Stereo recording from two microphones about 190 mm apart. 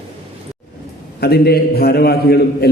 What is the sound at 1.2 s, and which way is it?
A man's voice, 55° left (ahead or behind).